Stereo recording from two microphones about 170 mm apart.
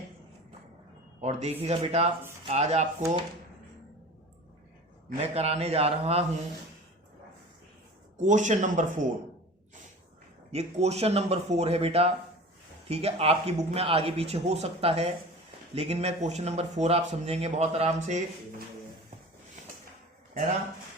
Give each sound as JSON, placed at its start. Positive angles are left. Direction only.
{"t": 1.2, "sound": "speech", "side_deg": -40}
{"t": 5.2, "sound": "speech", "side_deg": -35}
{"t": 8.2, "sound": "speech", "side_deg": -45}
{"t": 10.5, "sound": "speech", "side_deg": -40}
{"t": 19.6, "sound": "a sound", "side_deg": -45}